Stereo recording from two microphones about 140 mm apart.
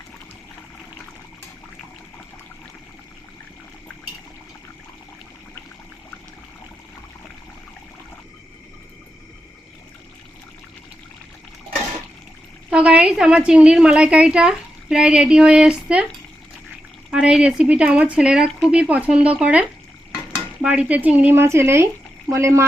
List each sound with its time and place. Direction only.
12.7 s a woman's voice: 10° right (ahead or behind)
17.1 s a woman's voice: 5° right (ahead or behind)